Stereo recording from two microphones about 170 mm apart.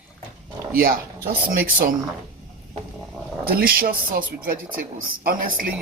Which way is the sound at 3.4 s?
60° right (ahead or behind).